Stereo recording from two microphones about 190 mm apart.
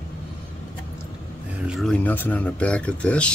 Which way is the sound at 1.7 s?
Centre (ahead or behind).